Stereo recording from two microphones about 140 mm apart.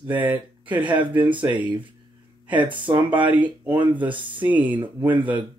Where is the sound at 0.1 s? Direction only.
10° right (ahead or behind).